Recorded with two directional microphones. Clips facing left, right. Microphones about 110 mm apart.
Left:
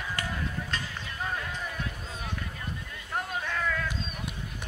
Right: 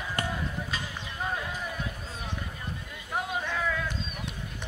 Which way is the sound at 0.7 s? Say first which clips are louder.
Even; 5° right (ahead or behind).